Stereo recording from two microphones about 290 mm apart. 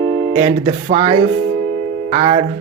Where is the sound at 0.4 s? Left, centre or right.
Right.